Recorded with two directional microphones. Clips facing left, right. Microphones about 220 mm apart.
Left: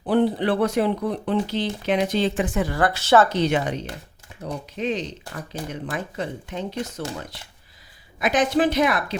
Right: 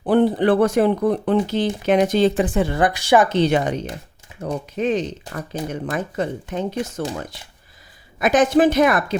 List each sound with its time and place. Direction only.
0.1 s speech: 50° right (ahead or behind); by 3.3 s 15° right (ahead or behind)
3.3 s speech: 35° right (ahead or behind)
4.8 s speech: 50° right (ahead or behind)
8.2 s speech: 45° right (ahead or behind)